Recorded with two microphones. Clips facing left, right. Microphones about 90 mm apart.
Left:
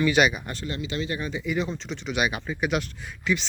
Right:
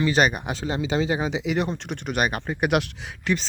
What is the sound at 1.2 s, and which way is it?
Speech, 90° right.